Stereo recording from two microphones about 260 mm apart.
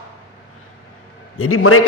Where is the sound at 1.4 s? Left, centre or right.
Left.